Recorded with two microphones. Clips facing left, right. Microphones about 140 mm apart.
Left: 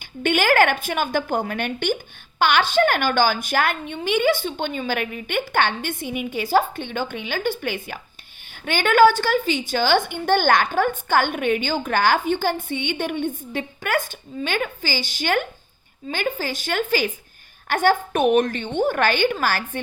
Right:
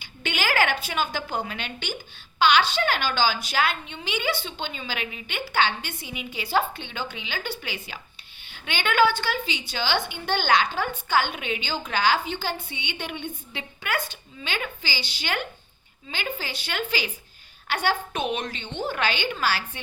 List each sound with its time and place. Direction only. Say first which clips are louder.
0.0 s a woman's voice: left 8 dB; 50° left (ahead or behind)